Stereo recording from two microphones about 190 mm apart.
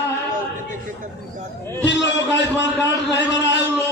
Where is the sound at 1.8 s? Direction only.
70° left (ahead or behind).